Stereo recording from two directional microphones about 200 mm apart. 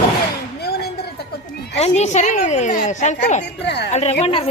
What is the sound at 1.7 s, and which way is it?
Speech, 35° left (ahead or behind).